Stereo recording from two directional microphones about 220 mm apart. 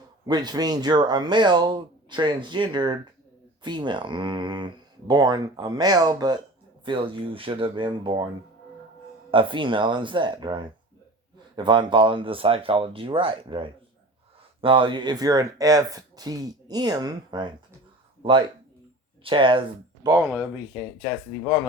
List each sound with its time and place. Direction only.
0.3 s speech: 20° right (ahead or behind)
9.3 s speech: 20° right (ahead or behind)